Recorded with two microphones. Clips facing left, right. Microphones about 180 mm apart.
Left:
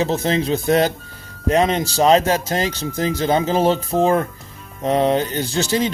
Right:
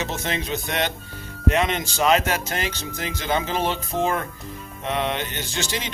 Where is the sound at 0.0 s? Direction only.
35° left (ahead or behind).